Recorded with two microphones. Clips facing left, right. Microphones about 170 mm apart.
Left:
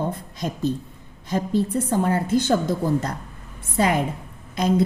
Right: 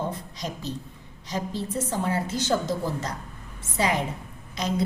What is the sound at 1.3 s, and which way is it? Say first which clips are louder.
A woman's voice: left 8 dB; 55° left (ahead or behind).